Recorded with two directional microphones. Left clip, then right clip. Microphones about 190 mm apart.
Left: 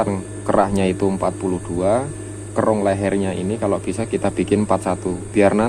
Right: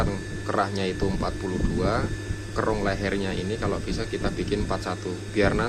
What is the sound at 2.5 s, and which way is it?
A man's voice, 35° left (ahead or behind).